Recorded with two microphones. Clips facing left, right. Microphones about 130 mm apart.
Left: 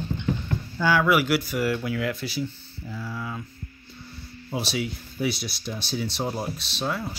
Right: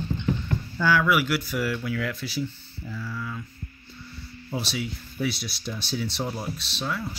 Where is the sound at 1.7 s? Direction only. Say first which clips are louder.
Left 2 dB; 10° left (ahead or behind).